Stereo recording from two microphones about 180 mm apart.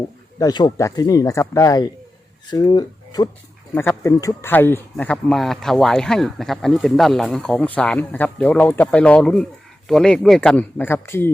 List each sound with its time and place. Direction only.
0.3 s speech: 20° left (ahead or behind)